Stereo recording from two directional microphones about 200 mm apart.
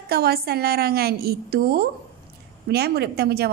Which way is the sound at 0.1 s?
50° right (ahead or behind).